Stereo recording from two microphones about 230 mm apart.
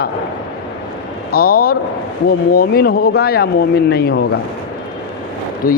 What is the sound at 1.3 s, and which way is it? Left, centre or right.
Speech, left.